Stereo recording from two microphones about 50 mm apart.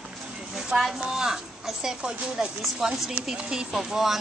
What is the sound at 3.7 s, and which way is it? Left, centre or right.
Speech, centre.